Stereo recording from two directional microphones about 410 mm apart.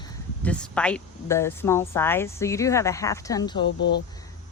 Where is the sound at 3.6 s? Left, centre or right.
Left.